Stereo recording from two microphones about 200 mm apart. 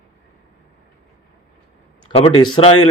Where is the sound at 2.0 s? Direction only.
30° left (ahead or behind).